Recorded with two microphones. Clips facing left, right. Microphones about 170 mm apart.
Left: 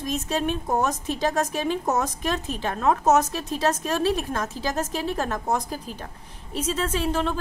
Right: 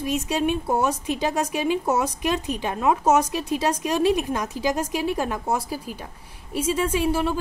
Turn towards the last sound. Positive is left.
turn(degrees=-10)  # may be behind; listen again after turning